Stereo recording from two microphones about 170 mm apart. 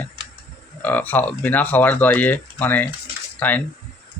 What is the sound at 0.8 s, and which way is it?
A man's voice, 10° left (ahead or behind).